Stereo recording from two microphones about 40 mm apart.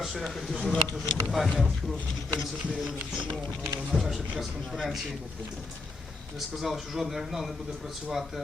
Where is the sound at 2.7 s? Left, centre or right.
Centre.